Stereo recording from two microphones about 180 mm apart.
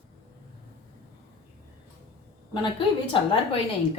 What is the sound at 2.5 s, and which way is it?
Speech, 25° left (ahead or behind).